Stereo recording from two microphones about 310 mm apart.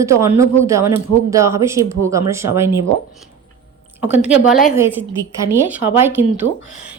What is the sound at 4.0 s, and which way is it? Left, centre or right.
A woman's voice, centre.